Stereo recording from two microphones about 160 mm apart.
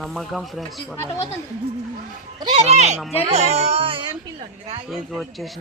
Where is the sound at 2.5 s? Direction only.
45° right (ahead or behind).